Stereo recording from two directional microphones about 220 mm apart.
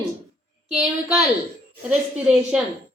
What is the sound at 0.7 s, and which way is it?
Speech, 5° right (ahead or behind).